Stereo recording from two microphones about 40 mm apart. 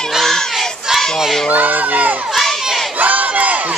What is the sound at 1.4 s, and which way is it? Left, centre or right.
Crowd, right.